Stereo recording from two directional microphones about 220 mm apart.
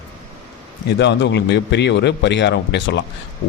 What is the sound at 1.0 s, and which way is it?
Speech, 55° left (ahead or behind).